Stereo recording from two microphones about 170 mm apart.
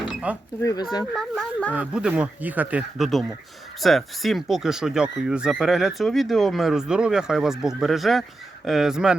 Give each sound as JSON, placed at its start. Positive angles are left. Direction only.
{"t": 0.1, "sound": "a sound", "side_deg": -10}
{"t": 0.6, "sound": "speech", "side_deg": 20}
{"t": 1.1, "sound": "speech", "side_deg": 5}